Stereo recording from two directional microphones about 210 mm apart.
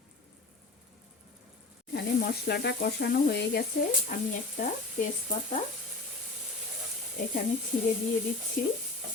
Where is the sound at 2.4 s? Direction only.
50° left (ahead or behind); by 5.6 s 35° left (ahead or behind).